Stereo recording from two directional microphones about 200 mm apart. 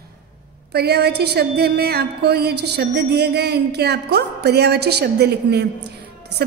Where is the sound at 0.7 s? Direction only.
55° right (ahead or behind).